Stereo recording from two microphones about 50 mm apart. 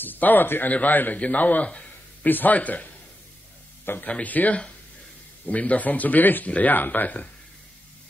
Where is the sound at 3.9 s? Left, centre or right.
Left.